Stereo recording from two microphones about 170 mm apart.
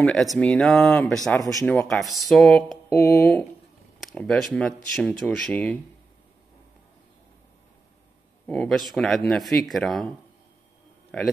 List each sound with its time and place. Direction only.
0.0 s speech: centre (ahead or behind)
1.4 s speech: 20° left (ahead or behind)
1.7 s speech: centre (ahead or behind)
2.9 s speech: 15° left (ahead or behind)
4.0 s speech: 5° left (ahead or behind)
8.5 s speech: 5° left (ahead or behind)